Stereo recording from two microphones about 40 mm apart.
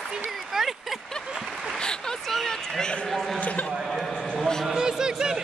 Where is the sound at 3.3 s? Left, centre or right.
Left.